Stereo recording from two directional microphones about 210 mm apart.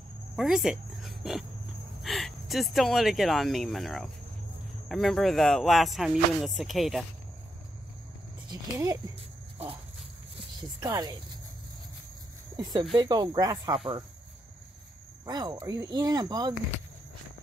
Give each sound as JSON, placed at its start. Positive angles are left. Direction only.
{"t": 0.4, "sound": "speech", "side_deg": -5}
{"t": 8.5, "sound": "speech", "side_deg": -15}
{"t": 10.8, "sound": "speech", "side_deg": -20}
{"t": 12.5, "sound": "speech", "side_deg": -20}
{"t": 15.2, "sound": "speech", "side_deg": -20}